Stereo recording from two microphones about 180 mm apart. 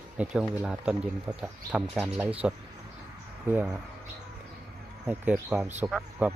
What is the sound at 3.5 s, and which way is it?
Speech, 10° right (ahead or behind).